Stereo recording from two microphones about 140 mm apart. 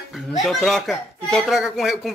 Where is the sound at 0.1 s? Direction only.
Centre (ahead or behind).